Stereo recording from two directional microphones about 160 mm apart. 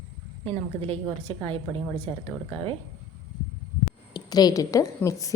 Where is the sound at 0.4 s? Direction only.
35° right (ahead or behind).